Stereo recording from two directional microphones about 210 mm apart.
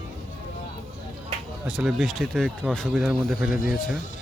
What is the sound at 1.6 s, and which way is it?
Speech, centre (ahead or behind).